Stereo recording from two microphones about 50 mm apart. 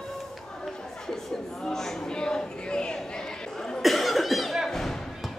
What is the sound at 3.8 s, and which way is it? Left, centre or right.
Cough, centre.